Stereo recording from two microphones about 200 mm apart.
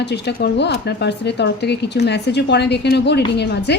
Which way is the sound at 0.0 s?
55° left (ahead or behind).